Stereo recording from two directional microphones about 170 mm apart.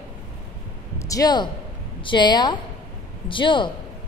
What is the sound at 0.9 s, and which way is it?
A woman's voice, 20° left (ahead or behind).